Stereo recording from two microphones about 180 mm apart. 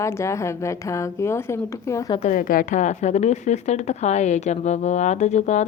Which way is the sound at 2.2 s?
45° left (ahead or behind).